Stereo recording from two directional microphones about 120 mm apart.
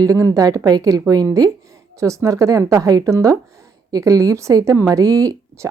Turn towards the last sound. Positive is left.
turn(degrees=-30)  # may be behind; listen again after turning